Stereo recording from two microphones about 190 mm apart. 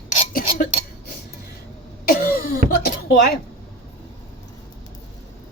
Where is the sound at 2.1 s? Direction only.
50° left (ahead or behind).